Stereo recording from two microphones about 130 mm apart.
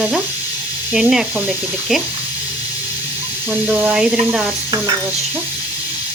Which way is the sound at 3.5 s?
10° right (ahead or behind).